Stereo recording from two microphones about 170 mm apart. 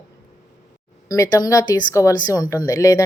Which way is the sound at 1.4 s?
20° left (ahead or behind).